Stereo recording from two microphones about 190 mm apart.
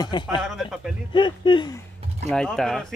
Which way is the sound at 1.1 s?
25° left (ahead or behind).